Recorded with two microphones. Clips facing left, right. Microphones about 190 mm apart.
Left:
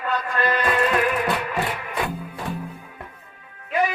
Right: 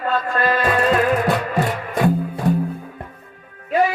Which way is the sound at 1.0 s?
45° right (ahead or behind).